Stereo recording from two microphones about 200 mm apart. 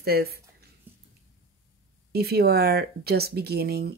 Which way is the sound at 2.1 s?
50° right (ahead or behind).